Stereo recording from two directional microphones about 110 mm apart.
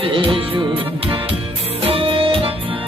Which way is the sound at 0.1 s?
55° right (ahead or behind).